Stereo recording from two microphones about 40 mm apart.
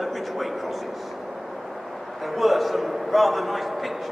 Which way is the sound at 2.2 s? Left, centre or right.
Centre.